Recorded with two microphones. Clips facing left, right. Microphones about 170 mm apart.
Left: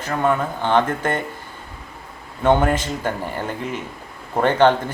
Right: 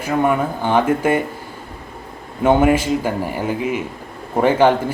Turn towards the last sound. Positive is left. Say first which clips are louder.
# right 2 dB
turn(degrees=-10)  # may be behind; listen again after turning